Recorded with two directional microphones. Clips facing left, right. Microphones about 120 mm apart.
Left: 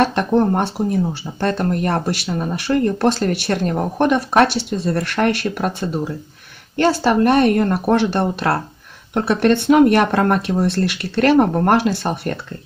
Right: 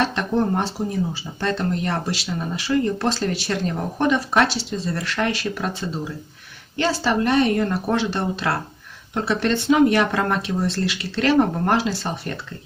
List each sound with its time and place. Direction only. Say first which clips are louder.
0.0 s speech: left 5 dB; 50° left (ahead or behind)